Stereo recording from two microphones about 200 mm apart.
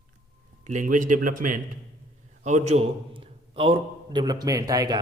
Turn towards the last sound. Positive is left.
turn(degrees=-20)  # may be behind; listen again after turning